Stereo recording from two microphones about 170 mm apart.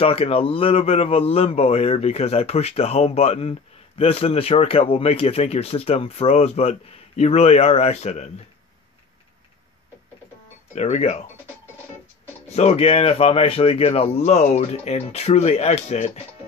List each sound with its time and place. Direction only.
0.0 s speech: 35° left (ahead or behind)
10.7 s speech: 40° left (ahead or behind)
12.5 s speech: 35° left (ahead or behind)